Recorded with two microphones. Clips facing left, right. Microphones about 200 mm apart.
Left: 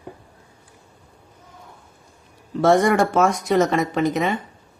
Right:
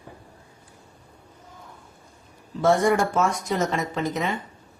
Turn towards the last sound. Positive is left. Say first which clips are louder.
# left 6 dB
turn(degrees=65)  # may be behind; listen again after turning